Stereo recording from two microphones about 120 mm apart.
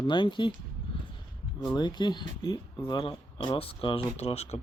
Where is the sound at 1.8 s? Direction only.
35° left (ahead or behind); by 4.6 s 60° left (ahead or behind).